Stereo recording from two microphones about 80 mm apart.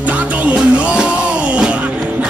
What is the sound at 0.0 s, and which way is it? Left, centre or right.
Music, centre.